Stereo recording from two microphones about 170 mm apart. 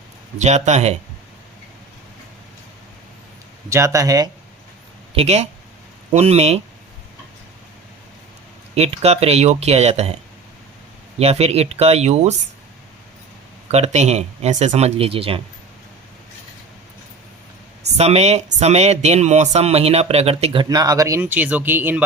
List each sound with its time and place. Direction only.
0.3 s speech: 45° right (ahead or behind)
3.7 s speech: 15° right (ahead or behind)
5.1 s speech: 40° right (ahead or behind)
8.7 s speech: 35° right (ahead or behind)
11.2 s speech: 35° right (ahead or behind)
13.7 s speech: 40° right (ahead or behind)
17.9 s speech: 40° right (ahead or behind); by 22.0 s 10° right (ahead or behind)